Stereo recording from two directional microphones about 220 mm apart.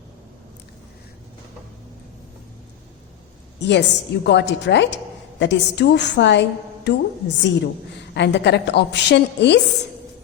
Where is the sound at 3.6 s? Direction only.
50° left (ahead or behind).